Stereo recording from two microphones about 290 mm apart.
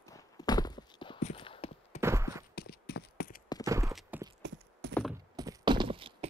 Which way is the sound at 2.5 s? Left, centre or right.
Left.